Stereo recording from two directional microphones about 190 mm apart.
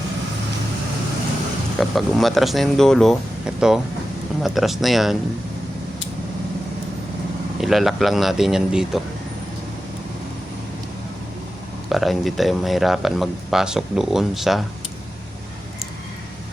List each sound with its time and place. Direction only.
1.8 s speech: centre (ahead or behind)
7.6 s speech: centre (ahead or behind)
11.9 s speech: centre (ahead or behind)